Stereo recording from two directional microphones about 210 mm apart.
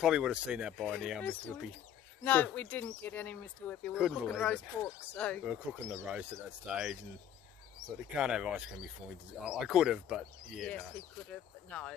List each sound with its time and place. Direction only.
0.0 s speech: 5° right (ahead or behind)
8.2 s speech: 5° right (ahead or behind)